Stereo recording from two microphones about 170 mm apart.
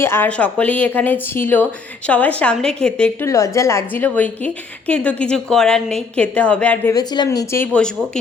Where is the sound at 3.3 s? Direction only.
20° left (ahead or behind).